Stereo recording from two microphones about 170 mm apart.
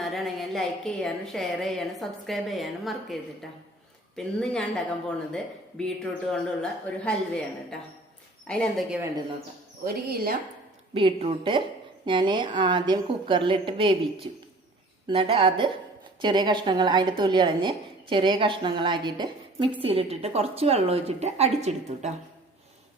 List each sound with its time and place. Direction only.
0.0 s speech: centre (ahead or behind)
9.8 s speech: 65° right (ahead or behind)
10.9 s a woman's voice: 35° right (ahead or behind)